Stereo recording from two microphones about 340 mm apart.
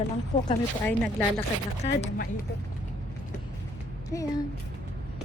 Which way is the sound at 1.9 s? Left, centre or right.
Left.